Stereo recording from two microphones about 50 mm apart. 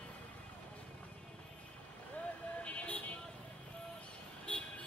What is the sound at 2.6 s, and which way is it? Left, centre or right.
Vehicle, left.